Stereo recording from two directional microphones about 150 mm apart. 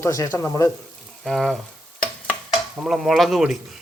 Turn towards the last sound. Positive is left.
turn(degrees=0)  # may be behind; listen again after turning